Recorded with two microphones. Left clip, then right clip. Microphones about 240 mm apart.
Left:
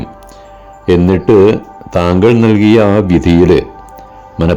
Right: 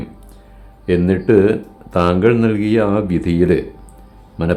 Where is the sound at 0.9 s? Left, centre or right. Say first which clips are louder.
Left 6 dB; left.